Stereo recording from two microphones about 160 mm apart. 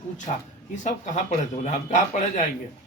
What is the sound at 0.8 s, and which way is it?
A man's voice, 50° left (ahead or behind).